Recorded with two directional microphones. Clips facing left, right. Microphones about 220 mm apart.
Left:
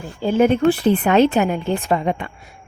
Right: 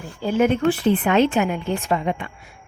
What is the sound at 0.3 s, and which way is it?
A woman's voice, 30° left (ahead or behind).